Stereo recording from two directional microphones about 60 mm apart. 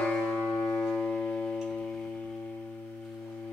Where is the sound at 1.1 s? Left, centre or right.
Centre.